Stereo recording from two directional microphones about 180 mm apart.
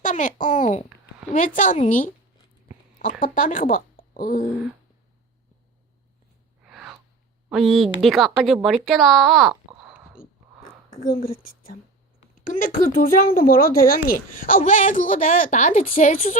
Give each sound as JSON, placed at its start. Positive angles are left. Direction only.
{"t": 0.0, "sound": "a sound", "side_deg": 45}
{"t": 1.5, "sound": "speech", "side_deg": 45}
{"t": 3.0, "sound": "speech", "side_deg": 50}
{"t": 6.7, "sound": "gasp", "side_deg": -5}
{"t": 7.5, "sound": "a woman's voice", "side_deg": 0}
{"t": 11.0, "sound": "speech", "side_deg": 55}